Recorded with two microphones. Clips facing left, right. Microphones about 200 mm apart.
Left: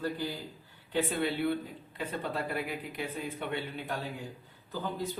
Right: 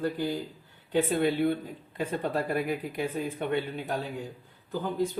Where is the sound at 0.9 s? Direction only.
50° right (ahead or behind).